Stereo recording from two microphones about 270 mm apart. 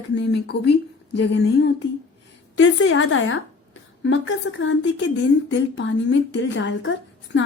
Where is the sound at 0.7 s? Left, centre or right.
Left.